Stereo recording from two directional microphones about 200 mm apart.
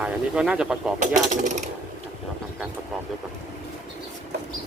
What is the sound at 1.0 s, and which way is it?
Speech, 40° right (ahead or behind).